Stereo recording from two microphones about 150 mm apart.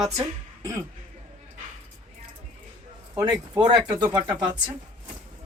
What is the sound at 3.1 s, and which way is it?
Speech, 25° right (ahead or behind).